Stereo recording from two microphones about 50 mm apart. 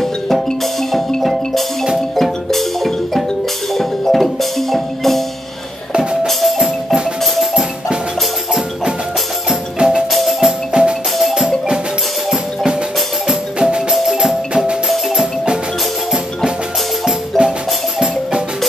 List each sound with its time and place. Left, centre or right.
0.9 s music: centre
6.2 s music: centre
9.8 s music: centre
11.1 s music: centre
13.6 s music: centre
13.9 s music: centre
14.5 s music: centre
17.3 s music: centre